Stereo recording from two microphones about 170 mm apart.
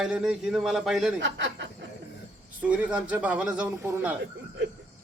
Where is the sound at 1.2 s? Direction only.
90° right.